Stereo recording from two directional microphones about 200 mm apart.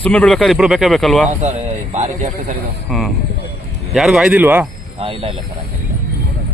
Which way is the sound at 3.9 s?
5° right (ahead or behind).